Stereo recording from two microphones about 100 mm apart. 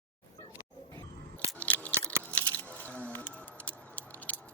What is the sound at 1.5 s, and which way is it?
Chewing, 15° left (ahead or behind).